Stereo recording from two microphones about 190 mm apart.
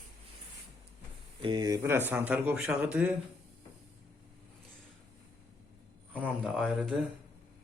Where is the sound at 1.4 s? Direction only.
25° right (ahead or behind); by 3.1 s 5° right (ahead or behind).